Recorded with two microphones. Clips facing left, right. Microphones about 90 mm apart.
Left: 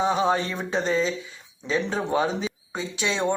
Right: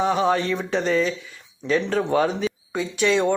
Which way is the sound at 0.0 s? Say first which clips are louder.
Right 2 dB; 20° left (ahead or behind).